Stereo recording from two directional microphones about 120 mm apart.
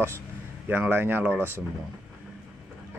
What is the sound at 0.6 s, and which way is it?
Speech, 15° right (ahead or behind).